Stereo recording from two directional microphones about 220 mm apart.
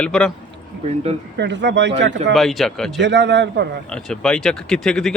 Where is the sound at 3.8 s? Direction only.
5° left (ahead or behind).